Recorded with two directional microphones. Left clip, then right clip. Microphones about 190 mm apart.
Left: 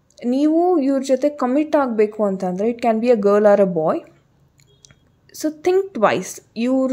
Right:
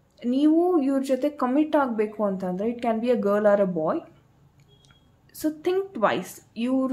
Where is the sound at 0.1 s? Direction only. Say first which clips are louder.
Left 4 dB; 35° left (ahead or behind).